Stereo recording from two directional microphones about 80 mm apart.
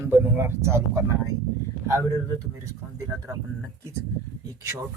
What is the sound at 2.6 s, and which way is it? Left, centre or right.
Speech, right.